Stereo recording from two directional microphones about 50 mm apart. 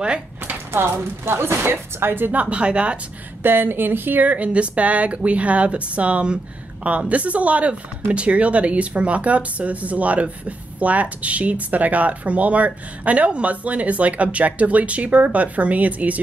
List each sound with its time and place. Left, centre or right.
0.7 s speech: right
2.4 s speech: right
3.4 s speech: right
4.3 s speech: right